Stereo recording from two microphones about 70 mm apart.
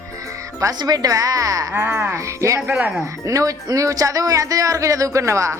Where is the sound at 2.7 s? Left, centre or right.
Right.